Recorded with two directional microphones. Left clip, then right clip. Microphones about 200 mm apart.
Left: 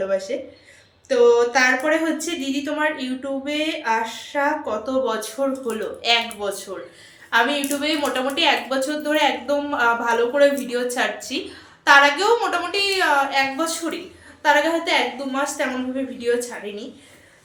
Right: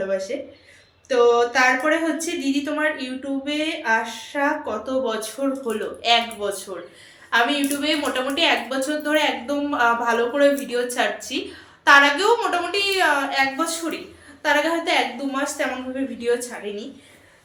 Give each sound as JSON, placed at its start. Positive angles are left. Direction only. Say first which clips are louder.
{"t": 0.1, "sound": "speech", "louder": "left 2 dB", "side_deg": 5}
{"t": 14.4, "sound": "speech", "louder": "left 2 dB", "side_deg": 5}